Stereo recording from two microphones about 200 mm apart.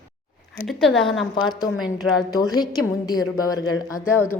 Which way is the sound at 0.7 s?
Centre (ahead or behind).